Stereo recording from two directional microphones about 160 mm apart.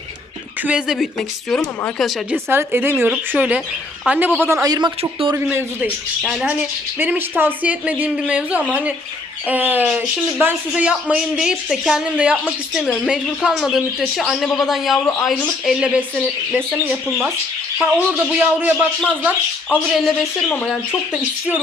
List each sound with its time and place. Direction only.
0.6 s speech: 5° right (ahead or behind)
2.3 s speech: 15° right (ahead or behind)
5.3 s speech: 15° right (ahead or behind)
17.7 s speech: 10° right (ahead or behind)
20.0 s speech: centre (ahead or behind)